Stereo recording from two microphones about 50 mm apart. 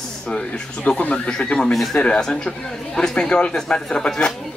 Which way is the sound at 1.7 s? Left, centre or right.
Centre.